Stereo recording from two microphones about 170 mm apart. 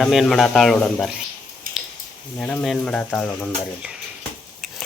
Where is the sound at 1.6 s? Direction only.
55° right (ahead or behind).